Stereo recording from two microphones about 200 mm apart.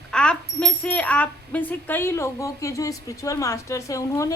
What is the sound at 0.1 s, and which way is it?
Speech, 5° left (ahead or behind).